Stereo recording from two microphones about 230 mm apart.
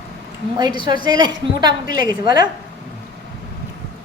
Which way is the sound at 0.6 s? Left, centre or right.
Centre.